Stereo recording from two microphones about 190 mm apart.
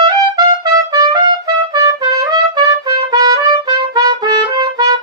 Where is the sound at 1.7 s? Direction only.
20° right (ahead or behind).